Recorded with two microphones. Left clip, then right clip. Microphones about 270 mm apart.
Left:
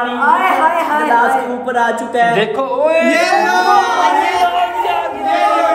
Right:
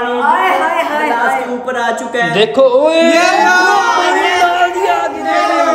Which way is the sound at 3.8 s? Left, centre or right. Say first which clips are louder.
Right 1 dB; right.